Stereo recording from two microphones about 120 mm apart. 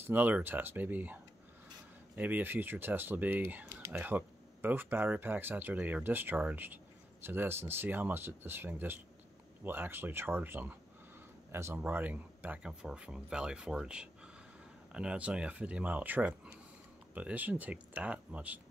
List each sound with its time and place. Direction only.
0.0 s speech: 15° right (ahead or behind)